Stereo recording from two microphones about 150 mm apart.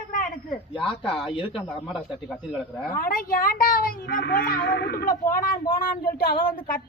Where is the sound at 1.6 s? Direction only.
5° right (ahead or behind).